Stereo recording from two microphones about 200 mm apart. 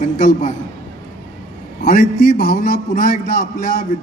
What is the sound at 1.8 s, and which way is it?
A man's voice, 35° left (ahead or behind).